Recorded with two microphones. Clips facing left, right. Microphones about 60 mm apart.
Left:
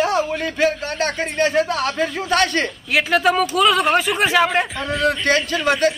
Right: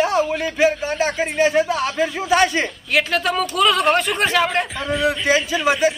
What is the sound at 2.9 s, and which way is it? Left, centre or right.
Speech, centre.